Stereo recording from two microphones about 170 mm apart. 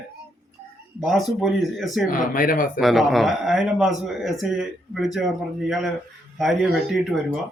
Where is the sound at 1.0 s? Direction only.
Centre (ahead or behind).